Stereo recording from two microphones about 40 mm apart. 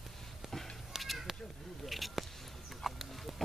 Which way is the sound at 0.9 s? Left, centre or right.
Centre.